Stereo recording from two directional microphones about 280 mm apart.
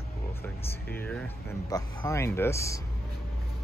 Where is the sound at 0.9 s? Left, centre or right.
Centre.